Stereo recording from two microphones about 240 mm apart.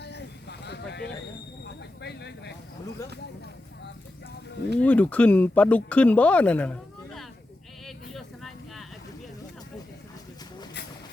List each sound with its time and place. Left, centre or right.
0.0 s vehicle: left
1.6 s a sound: left
4.8 s speech: centre
8.1 s vehicle: centre